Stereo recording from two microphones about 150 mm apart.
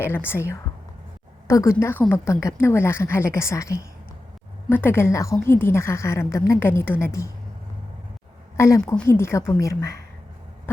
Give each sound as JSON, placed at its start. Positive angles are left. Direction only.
{"t": 0.3, "sound": "a woman's voice", "side_deg": 15}
{"t": 8.5, "sound": "a woman's voice", "side_deg": 20}